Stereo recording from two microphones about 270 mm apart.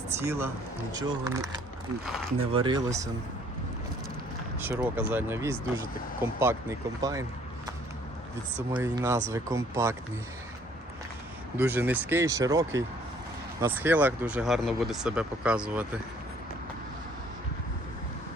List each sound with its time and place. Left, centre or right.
0.2 s speech: centre
2.5 s speech: centre
4.6 s speech: centre
8.5 s speech: centre
11.5 s speech: centre